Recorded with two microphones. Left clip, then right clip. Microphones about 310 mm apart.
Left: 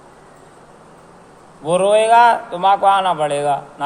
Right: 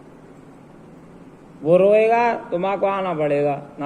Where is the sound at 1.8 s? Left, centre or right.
Left.